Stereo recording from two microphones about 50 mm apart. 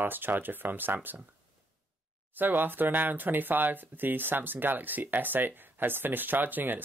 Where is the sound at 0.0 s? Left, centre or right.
Right.